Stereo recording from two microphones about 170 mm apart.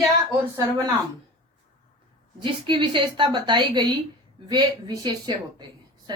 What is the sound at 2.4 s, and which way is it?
A woman's voice, 30° right (ahead or behind).